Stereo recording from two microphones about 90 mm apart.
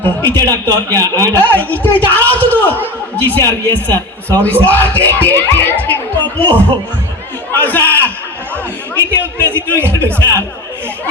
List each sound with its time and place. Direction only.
0.0 s a man's voice: 25° left (ahead or behind)
9.6 s a man's voice: 20° left (ahead or behind)